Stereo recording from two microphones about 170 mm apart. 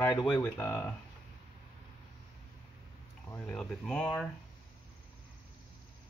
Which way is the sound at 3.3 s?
10° left (ahead or behind).